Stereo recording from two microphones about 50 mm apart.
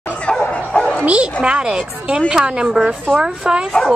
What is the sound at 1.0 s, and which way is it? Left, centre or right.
A woman's voice, right.